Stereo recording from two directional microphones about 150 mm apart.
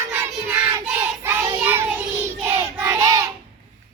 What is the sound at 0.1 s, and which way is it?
Child singing, 10° right (ahead or behind).